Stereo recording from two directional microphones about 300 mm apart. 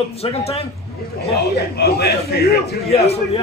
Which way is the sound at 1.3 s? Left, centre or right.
Left.